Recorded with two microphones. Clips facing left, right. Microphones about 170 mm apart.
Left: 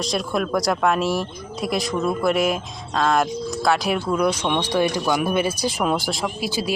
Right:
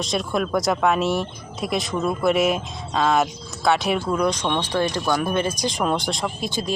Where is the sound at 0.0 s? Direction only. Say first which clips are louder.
Even; centre (ahead or behind).